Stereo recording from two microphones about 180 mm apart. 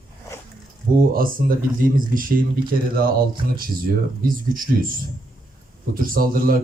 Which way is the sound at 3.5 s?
55° right (ahead or behind).